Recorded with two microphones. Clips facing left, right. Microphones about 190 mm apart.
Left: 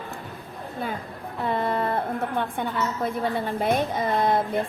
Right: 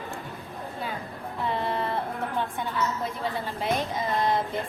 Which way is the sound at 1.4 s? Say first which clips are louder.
Left 4 dB; 50° left (ahead or behind).